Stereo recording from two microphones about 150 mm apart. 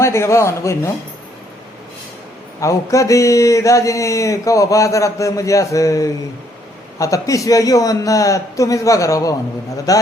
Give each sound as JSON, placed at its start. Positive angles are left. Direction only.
{"t": 0.0, "sound": "speech", "side_deg": 20}
{"t": 2.6, "sound": "speech", "side_deg": 20}